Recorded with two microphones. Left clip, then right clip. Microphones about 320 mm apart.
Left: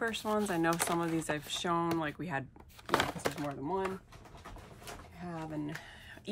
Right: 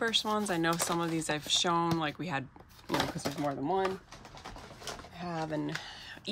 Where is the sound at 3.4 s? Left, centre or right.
Right.